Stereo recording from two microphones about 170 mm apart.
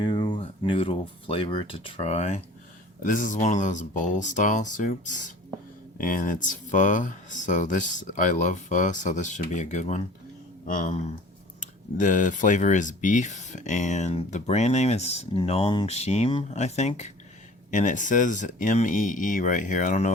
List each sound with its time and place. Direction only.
0.0 s speech: 25° left (ahead or behind)
3.0 s speech: 50° left (ahead or behind)